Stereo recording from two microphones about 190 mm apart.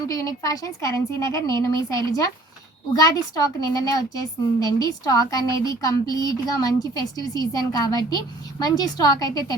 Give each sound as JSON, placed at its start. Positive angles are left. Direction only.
{"t": 0.1, "sound": "a woman's voice", "side_deg": 20}